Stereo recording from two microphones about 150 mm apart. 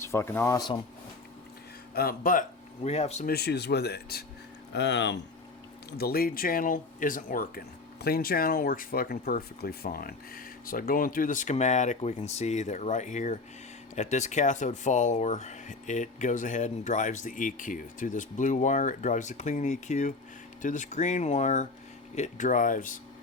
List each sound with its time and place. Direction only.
0.0 s speech: 15° left (ahead or behind)
2.0 s speech: 75° left (ahead or behind)
2.8 s speech: 45° left (ahead or behind)
3.2 s speech: 90° left
6.0 s speech: 90° left; by 7.6 s 70° left (ahead or behind)
8.0 s speech: 85° left; by 23.0 s 60° left (ahead or behind)